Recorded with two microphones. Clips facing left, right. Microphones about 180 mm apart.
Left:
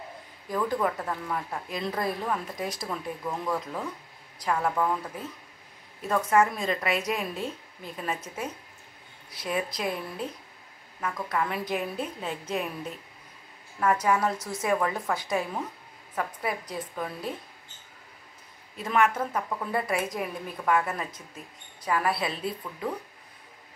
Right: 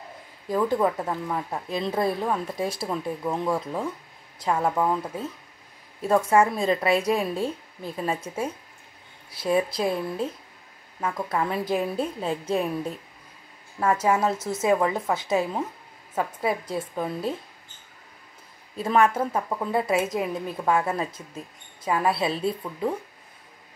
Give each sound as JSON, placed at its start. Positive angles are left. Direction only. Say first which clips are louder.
{"t": 0.5, "sound": "a woman's voice", "louder": "right 5 dB", "side_deg": -25}
{"t": 13.7, "sound": "a woman's voice", "louder": "right 2 dB", "side_deg": -25}
{"t": 18.8, "sound": "a woman's voice", "louder": "right 4 dB", "side_deg": -30}